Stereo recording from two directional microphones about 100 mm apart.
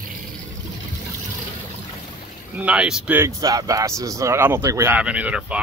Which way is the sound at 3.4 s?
35° right (ahead or behind).